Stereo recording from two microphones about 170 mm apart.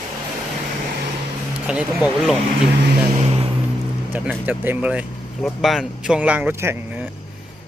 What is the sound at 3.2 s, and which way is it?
Vehicle, 35° right (ahead or behind).